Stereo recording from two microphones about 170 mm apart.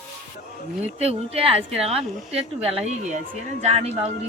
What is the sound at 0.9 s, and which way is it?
Speech, 35° right (ahead or behind).